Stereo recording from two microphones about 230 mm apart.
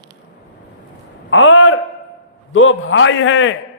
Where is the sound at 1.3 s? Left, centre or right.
Left.